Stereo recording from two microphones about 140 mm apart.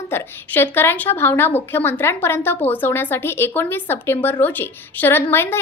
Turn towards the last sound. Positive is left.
turn(degrees=15)  # may be behind; listen again after turning